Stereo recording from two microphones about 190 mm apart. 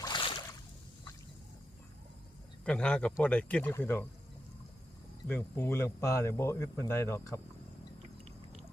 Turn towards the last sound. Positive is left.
turn(degrees=15)  # may be behind; listen again after turning